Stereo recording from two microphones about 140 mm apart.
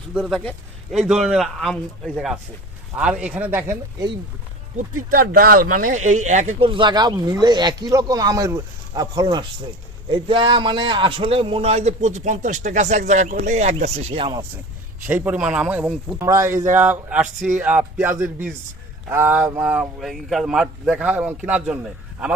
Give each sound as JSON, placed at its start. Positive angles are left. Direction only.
{"t": 0.2, "sound": "speech", "side_deg": 5}
{"t": 5.1, "sound": "speech", "side_deg": -90}
{"t": 6.6, "sound": "a man's voice", "side_deg": -40}
{"t": 15.0, "sound": "speech", "side_deg": -10}
{"t": 16.1, "sound": "speech", "side_deg": -20}